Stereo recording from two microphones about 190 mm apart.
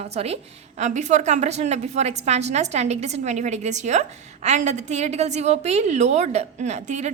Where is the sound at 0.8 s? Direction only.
40° right (ahead or behind).